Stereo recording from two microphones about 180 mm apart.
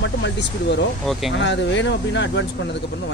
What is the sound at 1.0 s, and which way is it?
Speech, centre (ahead or behind).